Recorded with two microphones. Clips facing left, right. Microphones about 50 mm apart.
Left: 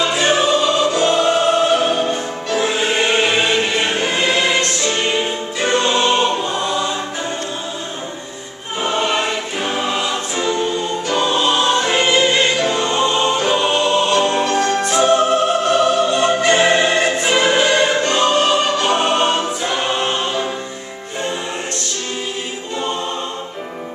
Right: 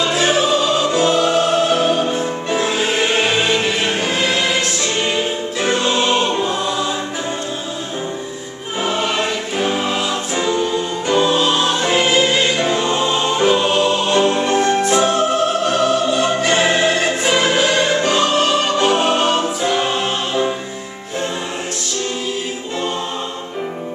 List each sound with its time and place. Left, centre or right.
0.0 s music: centre
8.8 s choir: centre
11.2 s music: centre
12.5 s choir: centre
13.5 s music: centre
14.4 s music: centre
14.9 s music: centre